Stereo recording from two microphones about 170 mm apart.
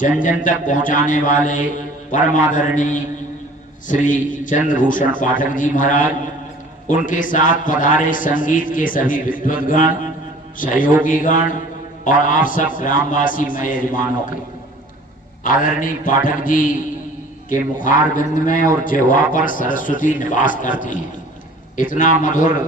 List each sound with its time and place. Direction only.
0.2 s a man's voice: 50° left (ahead or behind)
10.6 s a man's voice: 55° left (ahead or behind)
15.4 s a man's voice: 50° left (ahead or behind)